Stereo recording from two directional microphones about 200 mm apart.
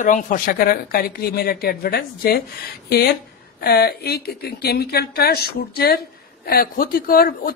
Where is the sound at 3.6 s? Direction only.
50° left (ahead or behind).